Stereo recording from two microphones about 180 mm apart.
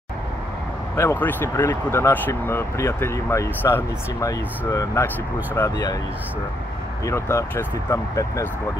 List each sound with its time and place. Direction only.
0.9 s speech: 10° left (ahead or behind)
7.1 s speech: 15° left (ahead or behind)